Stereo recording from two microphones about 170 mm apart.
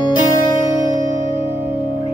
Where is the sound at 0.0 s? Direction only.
25° left (ahead or behind).